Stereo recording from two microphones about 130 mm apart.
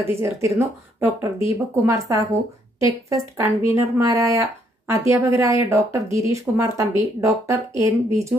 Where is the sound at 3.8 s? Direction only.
25° right (ahead or behind).